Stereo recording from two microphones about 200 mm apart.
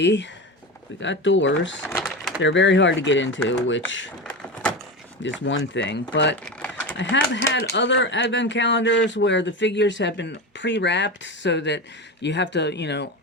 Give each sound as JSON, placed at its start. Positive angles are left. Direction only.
{"t": 0.0, "sound": "speech", "side_deg": 60}
{"t": 2.0, "sound": "a sound", "side_deg": -5}
{"t": 2.4, "sound": "speech", "side_deg": 65}
{"t": 5.2, "sound": "speech", "side_deg": 65}
{"t": 6.4, "sound": "pigeon", "side_deg": 5}
{"t": 6.9, "sound": "speech", "side_deg": 65}